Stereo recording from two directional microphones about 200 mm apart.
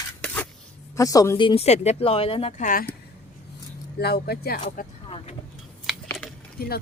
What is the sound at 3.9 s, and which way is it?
Speech, 50° left (ahead or behind).